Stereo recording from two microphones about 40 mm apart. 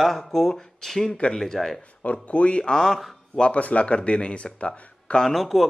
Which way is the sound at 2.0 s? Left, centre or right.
Left.